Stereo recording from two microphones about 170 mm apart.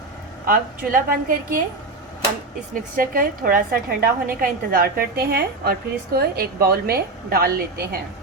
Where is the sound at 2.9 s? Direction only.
55° right (ahead or behind).